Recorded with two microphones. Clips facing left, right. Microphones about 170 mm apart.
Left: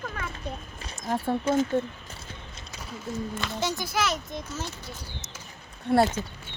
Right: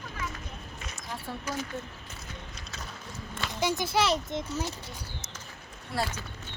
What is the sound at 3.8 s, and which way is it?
Speech, 30° right (ahead or behind).